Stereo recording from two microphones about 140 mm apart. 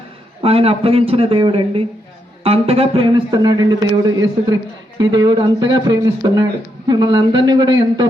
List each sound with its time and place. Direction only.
0.4 s a man's voice: 45° right (ahead or behind)